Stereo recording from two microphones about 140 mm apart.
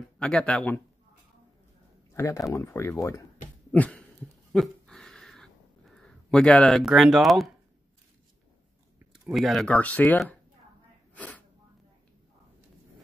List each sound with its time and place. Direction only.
0.2 s speech: 5° left (ahead or behind)
2.1 s speech: 20° left (ahead or behind)
3.7 s speech: 10° left (ahead or behind)
4.5 s a sound: centre (ahead or behind)
9.3 s speech: centre (ahead or behind)
9.7 s speech: 10° left (ahead or behind)
11.1 s sneeze: 10° left (ahead or behind)